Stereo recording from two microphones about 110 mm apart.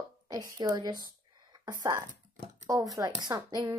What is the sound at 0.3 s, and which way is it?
Speech, 35° right (ahead or behind).